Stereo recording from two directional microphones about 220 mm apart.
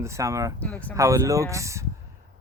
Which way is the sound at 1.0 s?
15° right (ahead or behind).